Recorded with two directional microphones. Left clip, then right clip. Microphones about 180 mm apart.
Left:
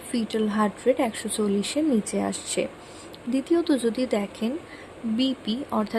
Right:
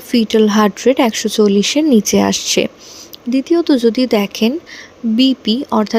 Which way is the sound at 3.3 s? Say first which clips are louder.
Right 10 dB; 35° right (ahead or behind).